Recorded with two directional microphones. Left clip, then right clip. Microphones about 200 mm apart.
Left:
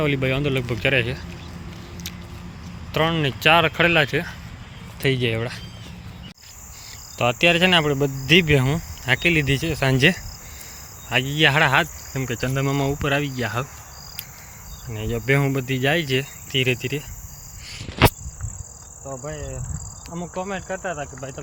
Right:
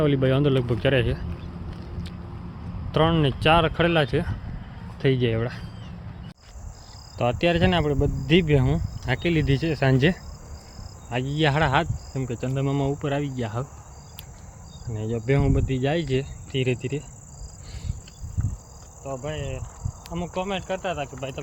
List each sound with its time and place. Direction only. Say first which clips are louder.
0.0 s speech: even; 15° right (ahead or behind)
2.9 s speech: even; 20° right (ahead or behind)
7.2 s speech: left 5 dB; 5° right (ahead or behind)
14.8 s speech: left 4 dB; 5° right (ahead or behind)
19.0 s speech: right 1 dB; centre (ahead or behind)